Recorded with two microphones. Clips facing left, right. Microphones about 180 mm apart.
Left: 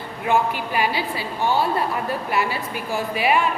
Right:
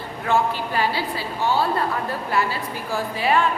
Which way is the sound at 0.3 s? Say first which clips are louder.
Left 1 dB; 15° left (ahead or behind).